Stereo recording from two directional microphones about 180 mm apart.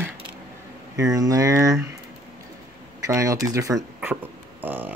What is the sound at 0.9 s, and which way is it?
Speech, 20° right (ahead or behind).